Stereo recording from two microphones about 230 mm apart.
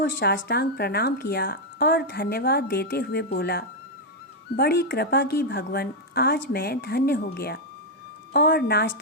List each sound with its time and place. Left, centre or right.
0.0 s speech: left